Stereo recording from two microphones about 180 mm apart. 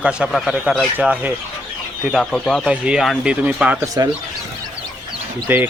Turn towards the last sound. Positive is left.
turn(degrees=-10)  # may be behind; listen again after turning